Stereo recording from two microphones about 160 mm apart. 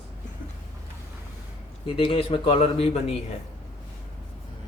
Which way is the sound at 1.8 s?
35° left (ahead or behind).